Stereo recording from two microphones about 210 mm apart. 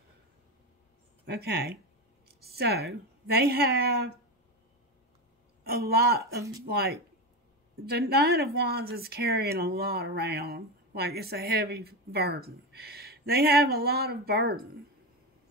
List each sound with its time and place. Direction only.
1.2 s a woman's voice: 50° right (ahead or behind)
5.6 s a woman's voice: 50° right (ahead or behind)